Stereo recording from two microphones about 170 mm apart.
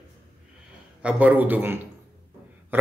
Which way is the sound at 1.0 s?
10° right (ahead or behind).